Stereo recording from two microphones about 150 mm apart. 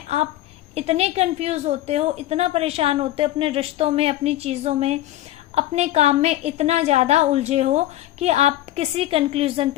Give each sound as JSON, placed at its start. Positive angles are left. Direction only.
{"t": 0.8, "sound": "a woman's voice", "side_deg": -45}